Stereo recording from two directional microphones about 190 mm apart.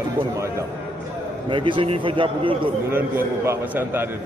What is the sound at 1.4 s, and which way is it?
A man's voice, 25° right (ahead or behind).